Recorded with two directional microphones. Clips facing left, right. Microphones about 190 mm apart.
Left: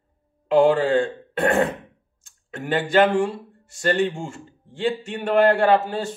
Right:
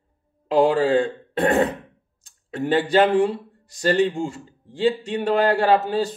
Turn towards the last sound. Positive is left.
turn(degrees=-35)  # may be behind; listen again after turning